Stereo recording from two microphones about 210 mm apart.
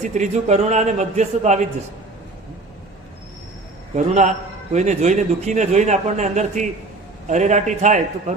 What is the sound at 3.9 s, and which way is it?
A man's voice, 35° right (ahead or behind).